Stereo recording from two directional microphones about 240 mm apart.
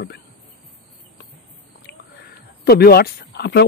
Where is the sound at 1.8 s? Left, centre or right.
Left.